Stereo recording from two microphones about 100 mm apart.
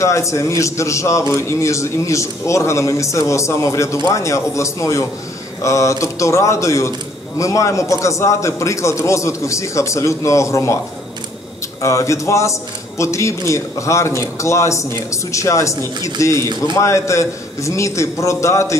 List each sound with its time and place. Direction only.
0.0 s a man's voice: 30° left (ahead or behind)
11.8 s a man's voice: 30° left (ahead or behind)